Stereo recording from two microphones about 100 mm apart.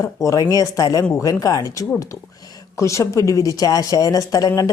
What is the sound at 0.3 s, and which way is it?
Speech, 35° left (ahead or behind).